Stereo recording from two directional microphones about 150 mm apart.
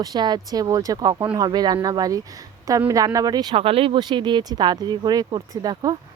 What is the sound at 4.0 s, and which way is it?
Speech, 30° right (ahead or behind).